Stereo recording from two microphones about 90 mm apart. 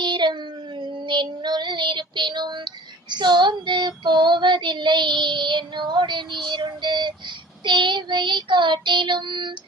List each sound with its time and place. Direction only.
0.0 s child singing: 60° right (ahead or behind)